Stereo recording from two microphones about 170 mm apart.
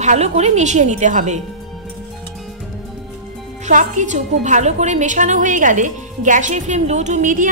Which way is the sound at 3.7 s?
50° right (ahead or behind).